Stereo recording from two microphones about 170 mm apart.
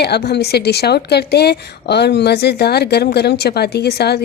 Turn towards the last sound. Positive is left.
turn(degrees=70)  # may be behind; listen again after turning